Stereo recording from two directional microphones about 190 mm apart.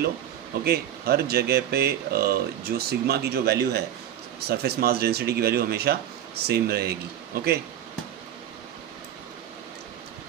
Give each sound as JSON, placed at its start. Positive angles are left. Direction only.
{"t": 0.7, "sound": "speech", "side_deg": -55}